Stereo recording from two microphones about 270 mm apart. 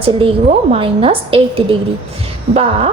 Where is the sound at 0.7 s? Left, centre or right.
Right.